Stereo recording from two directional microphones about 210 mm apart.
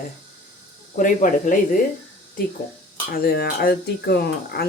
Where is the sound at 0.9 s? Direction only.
40° left (ahead or behind).